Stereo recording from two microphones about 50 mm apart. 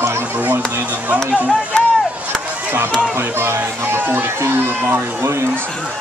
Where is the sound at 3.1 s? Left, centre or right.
Right.